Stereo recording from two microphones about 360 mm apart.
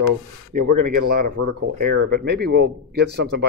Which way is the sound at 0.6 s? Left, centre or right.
Right.